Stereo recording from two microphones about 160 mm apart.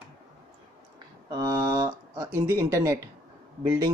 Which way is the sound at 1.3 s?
20° right (ahead or behind).